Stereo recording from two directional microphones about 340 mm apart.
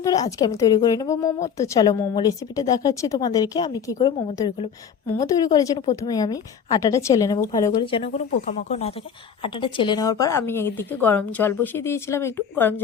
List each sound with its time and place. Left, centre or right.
0.0 s a woman's voice: centre